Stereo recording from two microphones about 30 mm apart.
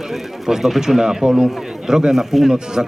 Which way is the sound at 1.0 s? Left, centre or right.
Centre.